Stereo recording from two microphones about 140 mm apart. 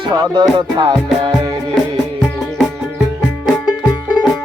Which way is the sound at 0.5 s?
35° right (ahead or behind).